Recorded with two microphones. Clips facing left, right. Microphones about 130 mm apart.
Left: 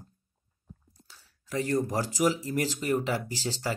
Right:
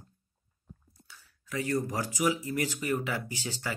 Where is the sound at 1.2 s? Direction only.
35° left (ahead or behind).